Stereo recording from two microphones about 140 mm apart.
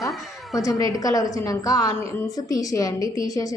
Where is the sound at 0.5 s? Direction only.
25° left (ahead or behind).